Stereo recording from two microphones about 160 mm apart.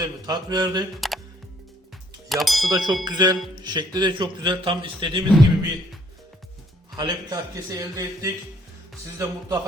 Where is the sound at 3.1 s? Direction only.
25° right (ahead or behind).